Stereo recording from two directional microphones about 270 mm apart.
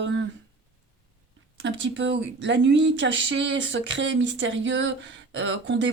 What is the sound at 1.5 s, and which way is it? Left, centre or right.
Speech, right.